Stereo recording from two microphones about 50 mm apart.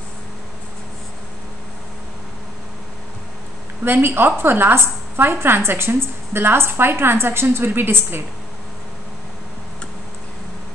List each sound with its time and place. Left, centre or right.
3.8 s a woman's voice: right